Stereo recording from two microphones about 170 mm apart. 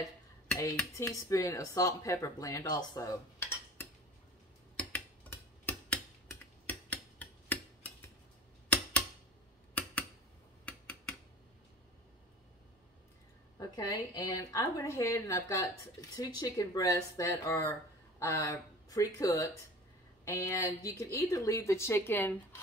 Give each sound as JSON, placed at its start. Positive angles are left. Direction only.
{"t": 0.9, "sound": "a woman's voice", "side_deg": 20}
{"t": 4.7, "sound": "tick-tock", "side_deg": 10}
{"t": 10.6, "sound": "a sound", "side_deg": 5}
{"t": 13.6, "sound": "a woman's voice", "side_deg": 20}